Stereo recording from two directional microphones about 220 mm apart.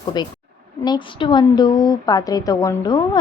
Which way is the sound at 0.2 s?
20° left (ahead or behind).